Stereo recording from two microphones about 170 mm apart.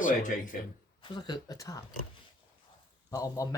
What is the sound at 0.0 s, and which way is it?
Speech, 50° left (ahead or behind).